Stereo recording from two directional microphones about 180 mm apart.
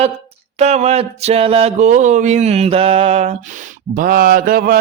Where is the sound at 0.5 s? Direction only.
35° right (ahead or behind).